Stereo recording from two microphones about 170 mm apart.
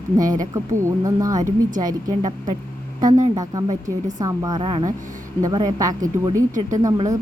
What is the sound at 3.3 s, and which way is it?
A woman's voice, 20° right (ahead or behind).